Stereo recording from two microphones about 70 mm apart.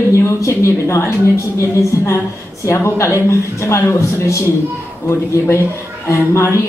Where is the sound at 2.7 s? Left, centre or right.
Left.